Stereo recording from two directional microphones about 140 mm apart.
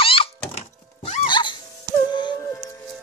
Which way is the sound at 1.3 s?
35° left (ahead or behind).